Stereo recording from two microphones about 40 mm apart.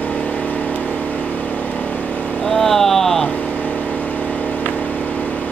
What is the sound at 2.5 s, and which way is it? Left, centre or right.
Vehicle, centre.